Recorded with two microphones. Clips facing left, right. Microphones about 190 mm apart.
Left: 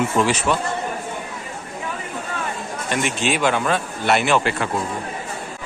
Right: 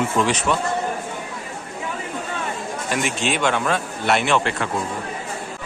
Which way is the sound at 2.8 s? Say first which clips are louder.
Left 2 dB; centre (ahead or behind).